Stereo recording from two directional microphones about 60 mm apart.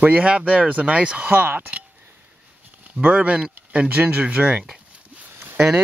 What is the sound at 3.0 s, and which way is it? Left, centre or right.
Speech, right.